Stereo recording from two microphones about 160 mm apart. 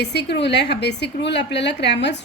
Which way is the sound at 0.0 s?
90° left.